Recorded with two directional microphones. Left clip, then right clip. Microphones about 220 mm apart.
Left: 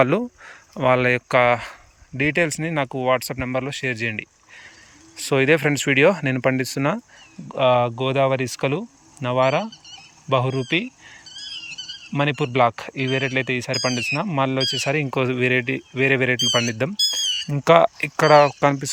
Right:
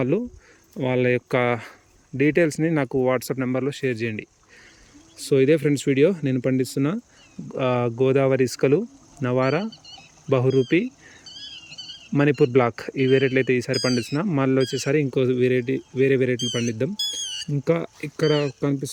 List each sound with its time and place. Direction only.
0.0 s speech: 30° left (ahead or behind)
0.8 s speech: 5° right (ahead or behind)
10.8 s a sound: 25° left (ahead or behind)
12.1 s speech: 15° right (ahead or behind)
17.5 s speech: 45° left (ahead or behind)
18.0 s speech: 5° right (ahead or behind)